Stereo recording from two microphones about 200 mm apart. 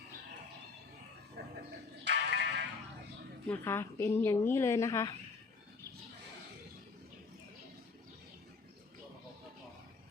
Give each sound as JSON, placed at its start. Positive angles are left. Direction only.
{"t": 1.4, "sound": "a sound", "side_deg": -55}
{"t": 2.0, "sound": "music", "side_deg": -60}
{"t": 3.5, "sound": "a woman's voice", "side_deg": 10}